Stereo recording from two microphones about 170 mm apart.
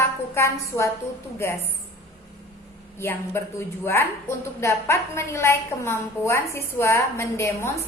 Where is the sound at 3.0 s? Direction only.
15° left (ahead or behind).